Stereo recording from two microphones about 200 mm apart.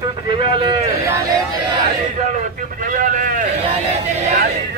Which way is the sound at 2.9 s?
40° right (ahead or behind).